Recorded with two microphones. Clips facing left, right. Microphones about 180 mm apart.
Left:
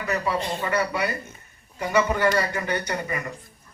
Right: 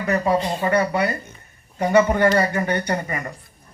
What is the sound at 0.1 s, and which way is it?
Speech, 50° right (ahead or behind).